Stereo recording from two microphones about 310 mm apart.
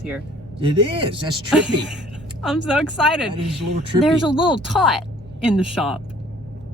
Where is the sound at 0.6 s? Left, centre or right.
Centre.